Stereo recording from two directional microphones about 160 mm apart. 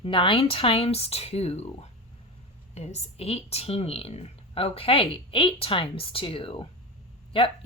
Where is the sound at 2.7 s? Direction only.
40° left (ahead or behind).